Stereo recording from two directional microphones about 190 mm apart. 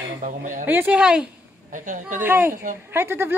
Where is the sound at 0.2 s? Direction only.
45° right (ahead or behind).